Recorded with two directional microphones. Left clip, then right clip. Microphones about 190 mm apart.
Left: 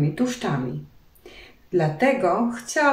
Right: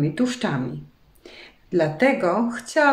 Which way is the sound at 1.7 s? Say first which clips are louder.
Right 1 dB; 60° right (ahead or behind).